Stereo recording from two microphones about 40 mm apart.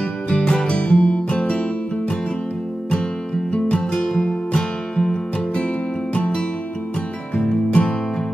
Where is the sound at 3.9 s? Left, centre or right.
Centre; by 6.4 s left.